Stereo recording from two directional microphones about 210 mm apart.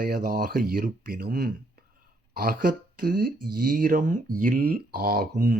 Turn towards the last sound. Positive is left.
turn(degrees=-45)  # may be behind; listen again after turning